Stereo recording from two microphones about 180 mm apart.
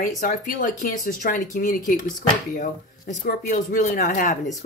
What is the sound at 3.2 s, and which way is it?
Speech, 50° left (ahead or behind).